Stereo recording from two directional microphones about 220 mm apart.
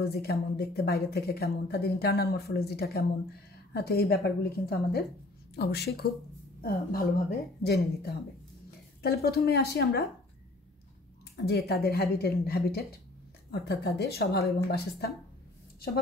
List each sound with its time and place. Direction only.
0.0 s speech: 45° left (ahead or behind)
11.3 s speech: 45° left (ahead or behind)